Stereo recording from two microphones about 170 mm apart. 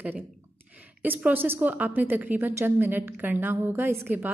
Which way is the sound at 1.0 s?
10° right (ahead or behind).